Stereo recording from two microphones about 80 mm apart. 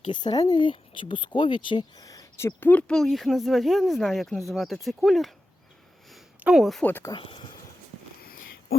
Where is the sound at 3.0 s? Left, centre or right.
Centre.